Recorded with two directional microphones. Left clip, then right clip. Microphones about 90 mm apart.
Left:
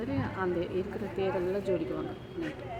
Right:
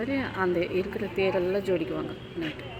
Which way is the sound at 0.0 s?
30° right (ahead or behind).